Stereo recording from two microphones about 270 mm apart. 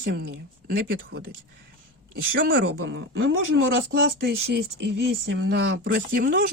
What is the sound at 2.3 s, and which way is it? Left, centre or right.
Speech, right.